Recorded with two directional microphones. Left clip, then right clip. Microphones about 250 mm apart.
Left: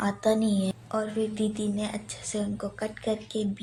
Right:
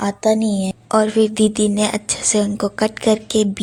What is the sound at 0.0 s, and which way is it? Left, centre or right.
A woman's voice, right.